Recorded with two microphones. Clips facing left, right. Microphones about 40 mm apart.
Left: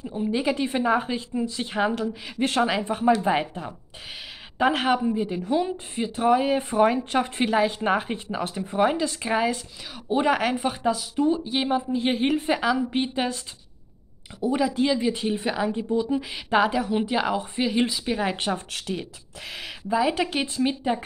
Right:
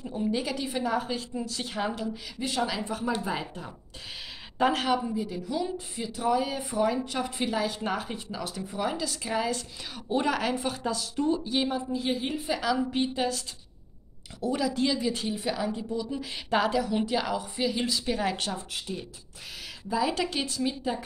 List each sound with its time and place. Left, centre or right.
0.0 s a woman's voice: centre
2.3 s a woman's voice: left
2.6 s speech: left
4.6 s a woman's voice: centre
4.8 s speech: left
9.5 s a woman's voice: centre; by 12.3 s left
12.5 s a woman's voice: left
14.4 s a woman's voice: left
16.2 s a woman's voice: centre
18.7 s speech: left
19.9 s a woman's voice: left